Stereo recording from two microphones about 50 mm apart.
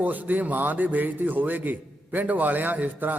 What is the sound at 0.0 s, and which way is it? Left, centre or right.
A man's voice, right.